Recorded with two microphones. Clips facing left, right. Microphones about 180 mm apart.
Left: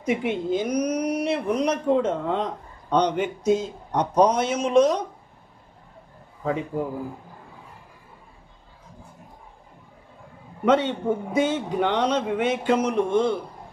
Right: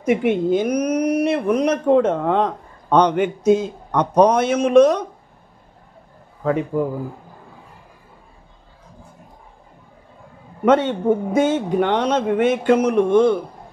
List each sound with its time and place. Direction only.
0.0 s speech: 55° right (ahead or behind)
6.4 s speech: 55° right (ahead or behind)
10.6 s a man's voice: 50° right (ahead or behind)